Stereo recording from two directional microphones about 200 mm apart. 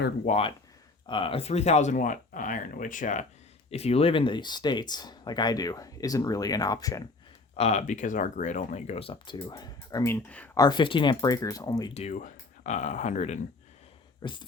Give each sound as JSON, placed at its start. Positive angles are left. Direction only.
{"t": 0.3, "sound": "speech", "side_deg": 30}
{"t": 7.5, "sound": "speech", "side_deg": 35}
{"t": 10.6, "sound": "speech", "side_deg": 20}
{"t": 11.9, "sound": "speech", "side_deg": 35}
{"t": 14.2, "sound": "speech", "side_deg": 20}